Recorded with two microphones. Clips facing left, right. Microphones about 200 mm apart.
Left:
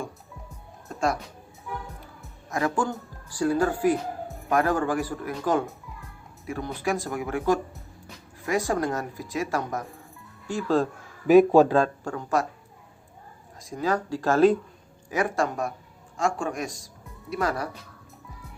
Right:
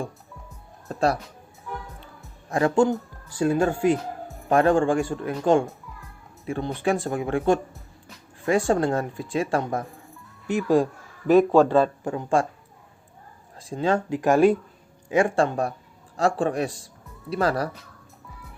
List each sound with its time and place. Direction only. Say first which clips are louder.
0.9 s music: right 4 dB; 35° right (ahead or behind)
2.5 s speech: right 6 dB; 30° right (ahead or behind)
10.4 s speech: right 4 dB; 20° right (ahead or behind)
11.3 s a man's voice: left 1 dB; 10° left (ahead or behind)
12.0 s speech: right 3 dB; 25° right (ahead or behind)
13.6 s speech: right 3 dB; 30° right (ahead or behind); by 14.6 s 10° right (ahead or behind)
15.1 s speech: right 5 dB; 25° right (ahead or behind)